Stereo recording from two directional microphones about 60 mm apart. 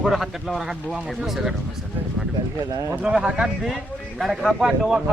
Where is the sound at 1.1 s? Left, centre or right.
Centre.